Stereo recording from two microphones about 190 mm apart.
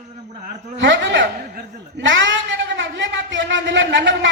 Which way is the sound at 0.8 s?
70° right (ahead or behind).